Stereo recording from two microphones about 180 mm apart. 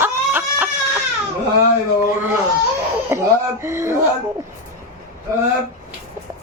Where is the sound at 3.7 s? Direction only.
15° right (ahead or behind).